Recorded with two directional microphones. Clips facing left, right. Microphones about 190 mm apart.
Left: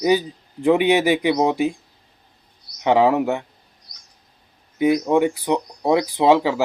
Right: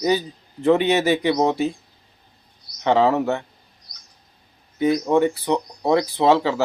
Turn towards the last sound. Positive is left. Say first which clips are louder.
# left 1 dB
turn(degrees=15)  # may be behind; listen again after turning